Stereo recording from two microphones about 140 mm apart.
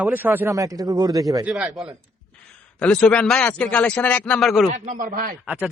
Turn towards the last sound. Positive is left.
turn(degrees=-5)  # may be behind; listen again after turning